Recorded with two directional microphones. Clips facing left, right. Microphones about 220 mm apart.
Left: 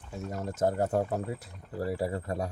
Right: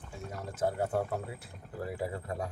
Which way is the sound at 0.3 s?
45° left (ahead or behind).